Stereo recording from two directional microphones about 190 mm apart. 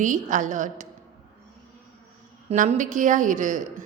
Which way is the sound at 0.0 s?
40° right (ahead or behind).